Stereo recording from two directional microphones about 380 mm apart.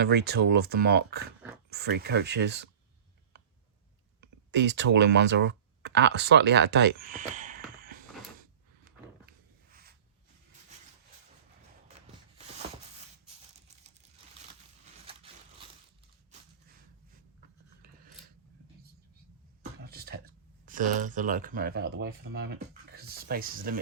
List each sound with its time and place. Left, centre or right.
0.0 s speech: right
4.2 s speech: right
7.8 s mechanisms: right
15.0 s a sound: centre
19.8 s speech: right